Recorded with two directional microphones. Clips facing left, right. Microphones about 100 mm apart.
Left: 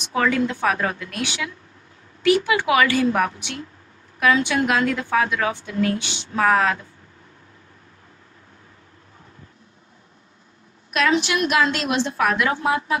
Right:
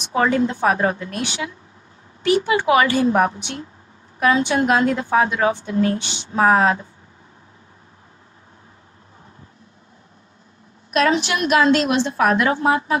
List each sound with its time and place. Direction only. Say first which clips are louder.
0.1 s a woman's voice: right 2 dB; 30° right (ahead or behind)
10.9 s a woman's voice: right 2 dB; 35° right (ahead or behind)